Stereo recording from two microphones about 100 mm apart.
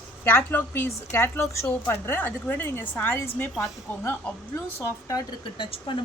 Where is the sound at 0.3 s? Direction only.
20° left (ahead or behind).